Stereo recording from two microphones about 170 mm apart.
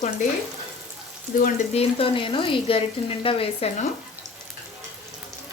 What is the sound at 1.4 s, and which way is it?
Speech, 40° left (ahead or behind).